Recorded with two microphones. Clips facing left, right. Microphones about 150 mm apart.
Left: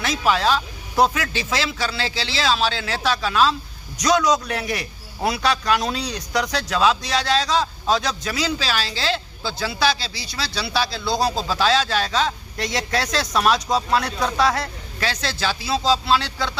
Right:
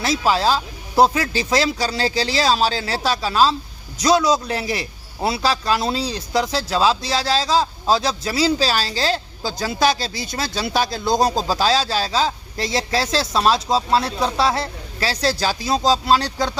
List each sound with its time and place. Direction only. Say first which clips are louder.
0.0 s a man's voice: right 2 dB; 35° right (ahead or behind)